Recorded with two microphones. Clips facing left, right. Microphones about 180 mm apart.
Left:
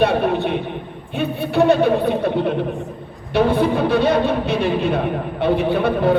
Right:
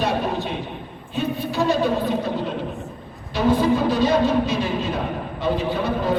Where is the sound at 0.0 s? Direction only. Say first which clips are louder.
Left 6 dB; 60° left (ahead or behind).